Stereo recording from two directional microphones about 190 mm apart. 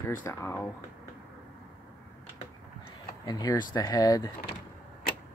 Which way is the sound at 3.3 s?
20° left (ahead or behind).